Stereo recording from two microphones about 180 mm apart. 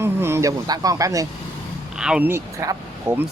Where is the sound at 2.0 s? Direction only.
5° right (ahead or behind).